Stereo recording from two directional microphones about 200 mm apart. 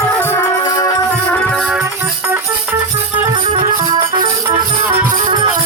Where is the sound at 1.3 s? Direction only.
5° left (ahead or behind).